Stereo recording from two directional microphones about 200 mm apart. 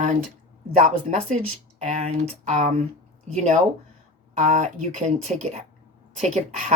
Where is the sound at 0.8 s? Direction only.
35° right (ahead or behind).